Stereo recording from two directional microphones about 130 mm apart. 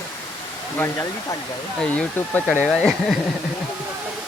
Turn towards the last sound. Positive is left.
turn(degrees=-5)  # may be behind; listen again after turning